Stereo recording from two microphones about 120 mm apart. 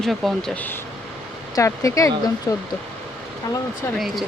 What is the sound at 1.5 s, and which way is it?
Speech, 30° left (ahead or behind).